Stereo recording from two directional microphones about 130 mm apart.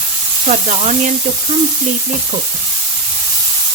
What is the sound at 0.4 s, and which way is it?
Speech, 65° right (ahead or behind).